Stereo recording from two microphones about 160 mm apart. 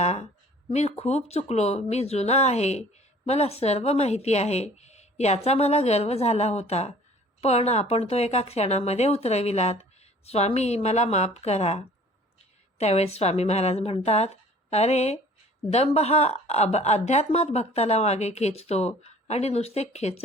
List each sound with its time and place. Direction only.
0.0 s a woman's voice: 45° left (ahead or behind)
12.8 s a woman's voice: 40° left (ahead or behind)